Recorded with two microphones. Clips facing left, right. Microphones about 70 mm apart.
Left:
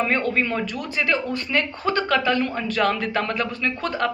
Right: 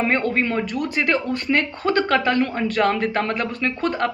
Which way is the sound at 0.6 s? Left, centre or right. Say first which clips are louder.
Right 3 dB; right.